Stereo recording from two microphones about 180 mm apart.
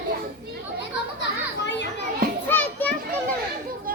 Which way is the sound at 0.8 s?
80° left.